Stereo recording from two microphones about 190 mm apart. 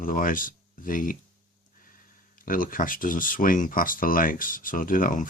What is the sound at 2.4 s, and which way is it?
Speech, 45° left (ahead or behind).